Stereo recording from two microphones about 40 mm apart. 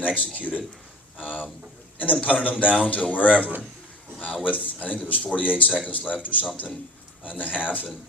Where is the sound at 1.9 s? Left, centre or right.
Left.